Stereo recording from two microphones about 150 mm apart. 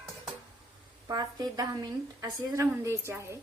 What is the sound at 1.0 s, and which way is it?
A woman's voice, 25° right (ahead or behind).